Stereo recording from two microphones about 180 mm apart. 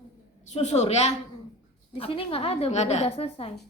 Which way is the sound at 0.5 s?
40° left (ahead or behind).